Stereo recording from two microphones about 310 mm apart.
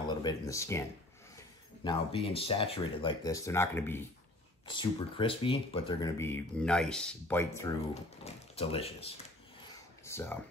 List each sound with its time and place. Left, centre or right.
0.0 s speech: centre
1.9 s speech: centre
8.2 s speech: centre
10.0 s speech: centre